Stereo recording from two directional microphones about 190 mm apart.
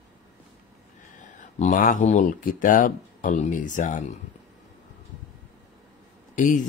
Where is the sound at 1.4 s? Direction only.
45° left (ahead or behind).